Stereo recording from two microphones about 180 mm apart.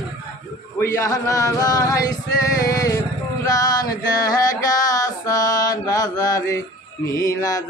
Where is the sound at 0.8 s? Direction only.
15° left (ahead or behind).